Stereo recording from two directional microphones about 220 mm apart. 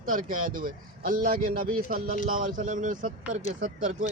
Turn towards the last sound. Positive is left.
turn(degrees=-30)  # may be behind; listen again after turning